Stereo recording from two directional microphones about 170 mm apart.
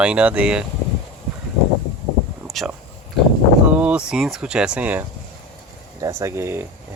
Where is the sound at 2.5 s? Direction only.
Centre (ahead or behind).